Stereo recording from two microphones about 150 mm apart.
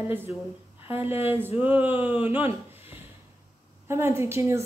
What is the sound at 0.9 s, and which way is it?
Speech, 15° right (ahead or behind).